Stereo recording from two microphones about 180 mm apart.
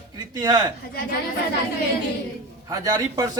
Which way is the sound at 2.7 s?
20° right (ahead or behind).